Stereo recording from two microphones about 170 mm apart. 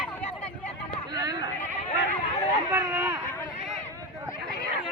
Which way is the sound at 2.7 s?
20° right (ahead or behind).